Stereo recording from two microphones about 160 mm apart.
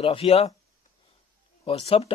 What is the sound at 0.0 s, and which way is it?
Speech, 35° left (ahead or behind).